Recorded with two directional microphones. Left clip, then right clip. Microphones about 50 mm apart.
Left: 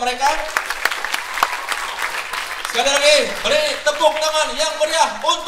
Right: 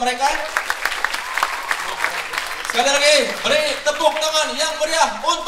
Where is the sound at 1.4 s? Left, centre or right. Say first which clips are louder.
Left 3 dB; left.